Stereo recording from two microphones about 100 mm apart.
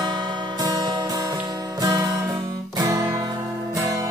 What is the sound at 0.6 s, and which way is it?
Music, 40° right (ahead or behind).